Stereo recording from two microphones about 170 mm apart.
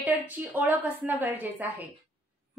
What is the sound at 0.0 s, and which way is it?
A woman's voice, 10° right (ahead or behind).